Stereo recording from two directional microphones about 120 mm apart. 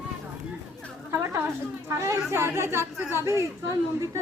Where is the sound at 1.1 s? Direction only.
25° right (ahead or behind).